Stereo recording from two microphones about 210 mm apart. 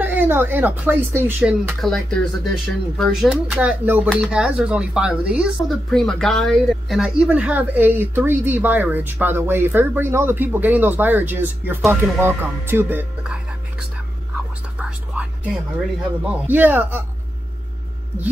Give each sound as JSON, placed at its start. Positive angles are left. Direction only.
{"t": 0.0, "sound": "speech", "side_deg": -10}
{"t": 14.8, "sound": "whispering", "side_deg": -5}
{"t": 16.4, "sound": "speech", "side_deg": -10}